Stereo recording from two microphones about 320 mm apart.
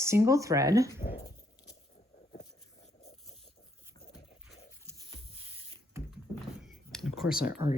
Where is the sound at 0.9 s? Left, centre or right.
Centre.